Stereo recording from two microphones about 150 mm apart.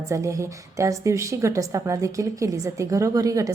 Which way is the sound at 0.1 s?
20° right (ahead or behind).